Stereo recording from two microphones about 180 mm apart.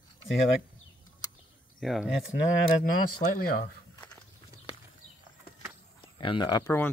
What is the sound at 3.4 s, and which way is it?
Speech, 55° left (ahead or behind).